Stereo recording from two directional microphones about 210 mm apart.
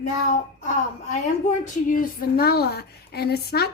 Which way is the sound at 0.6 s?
35° left (ahead or behind).